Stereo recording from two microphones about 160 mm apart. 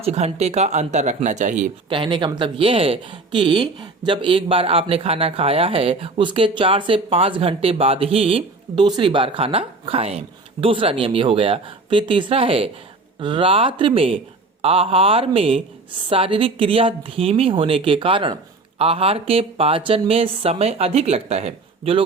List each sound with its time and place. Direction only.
0.0 s speech: 40° right (ahead or behind)
1.9 s speech: 30° right (ahead or behind)